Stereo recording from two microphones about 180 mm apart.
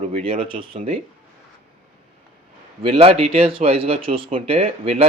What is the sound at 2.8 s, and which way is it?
Speech, 30° right (ahead or behind).